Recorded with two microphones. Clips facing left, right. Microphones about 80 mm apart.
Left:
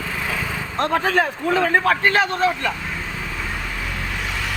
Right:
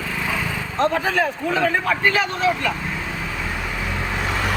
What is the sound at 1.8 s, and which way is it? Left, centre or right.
Speech, left.